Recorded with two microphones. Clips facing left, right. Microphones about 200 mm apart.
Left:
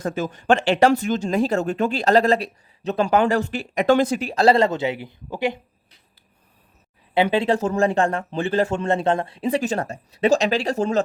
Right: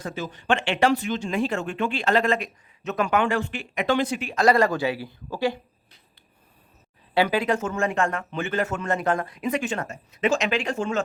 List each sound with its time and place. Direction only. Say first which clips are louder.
0.0 s speech: left 6 dB; 45° left (ahead or behind); by 5.5 s 20° left (ahead or behind)
7.1 s speech: left 3 dB; 25° left (ahead or behind)